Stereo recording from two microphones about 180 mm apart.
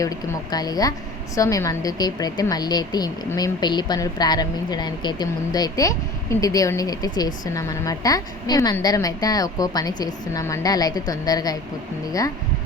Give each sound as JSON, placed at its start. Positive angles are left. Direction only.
{"t": 0.0, "sound": "a woman's voice", "side_deg": 20}